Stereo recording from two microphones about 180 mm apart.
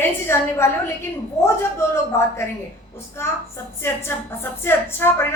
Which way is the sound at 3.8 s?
15° left (ahead or behind).